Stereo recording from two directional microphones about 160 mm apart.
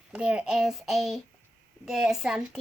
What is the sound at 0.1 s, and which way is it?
A child's voice, 5° right (ahead or behind).